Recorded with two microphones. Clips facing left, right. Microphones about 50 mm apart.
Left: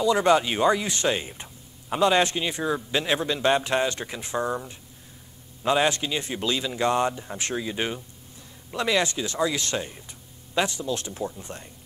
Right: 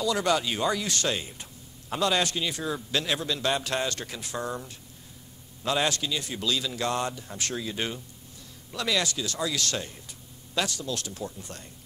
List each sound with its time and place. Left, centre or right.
0.0 s speech: left